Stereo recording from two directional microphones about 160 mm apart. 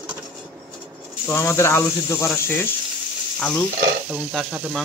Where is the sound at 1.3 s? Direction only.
15° left (ahead or behind).